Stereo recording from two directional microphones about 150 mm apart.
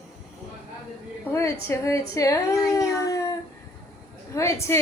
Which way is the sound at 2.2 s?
20° left (ahead or behind).